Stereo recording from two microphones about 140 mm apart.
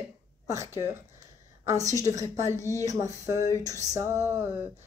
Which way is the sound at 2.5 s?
20° left (ahead or behind).